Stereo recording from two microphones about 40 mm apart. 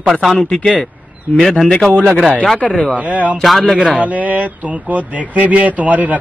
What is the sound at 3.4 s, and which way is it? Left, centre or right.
Speech, centre.